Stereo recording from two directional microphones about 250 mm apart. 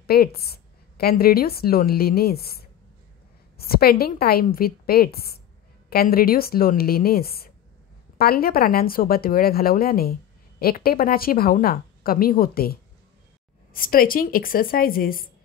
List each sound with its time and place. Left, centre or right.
0.0 s a woman's voice: left
13.7 s a woman's voice: left